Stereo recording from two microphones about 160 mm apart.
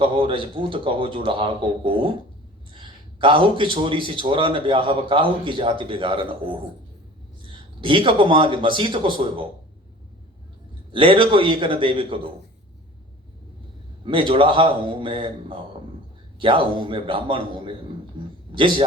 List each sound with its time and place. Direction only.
0.0 s a man's voice: 35° right (ahead or behind)
10.9 s speech: 30° right (ahead or behind)
14.0 s speech: 35° right (ahead or behind)
18.2 s a sound: 30° right (ahead or behind)
18.5 s speech: 30° right (ahead or behind)